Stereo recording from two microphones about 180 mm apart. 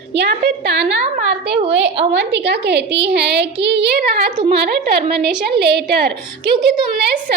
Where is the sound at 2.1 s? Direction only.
70° right (ahead or behind).